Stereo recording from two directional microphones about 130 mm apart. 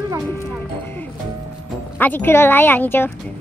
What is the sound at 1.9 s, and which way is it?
A woman's voice, 15° left (ahead or behind).